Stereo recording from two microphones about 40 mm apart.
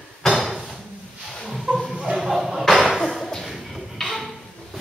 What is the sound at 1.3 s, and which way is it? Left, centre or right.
Roaring cats, centre.